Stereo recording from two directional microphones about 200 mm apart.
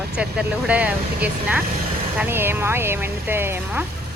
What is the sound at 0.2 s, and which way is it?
Speech, 5° right (ahead or behind).